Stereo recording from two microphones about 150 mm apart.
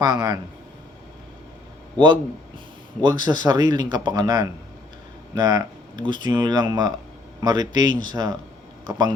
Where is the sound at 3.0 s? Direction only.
30° right (ahead or behind).